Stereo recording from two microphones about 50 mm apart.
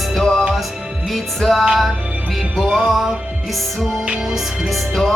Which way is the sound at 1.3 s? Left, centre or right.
Centre.